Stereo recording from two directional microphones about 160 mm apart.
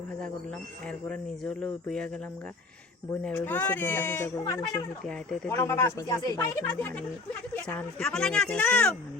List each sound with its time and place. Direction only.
0.9 s speech: 5° left (ahead or behind)
3.2 s speech: 10° left (ahead or behind)
4.6 s speech: 5° left (ahead or behind)
5.5 s speech: 15° left (ahead or behind)
7.7 s speech: 5° left (ahead or behind)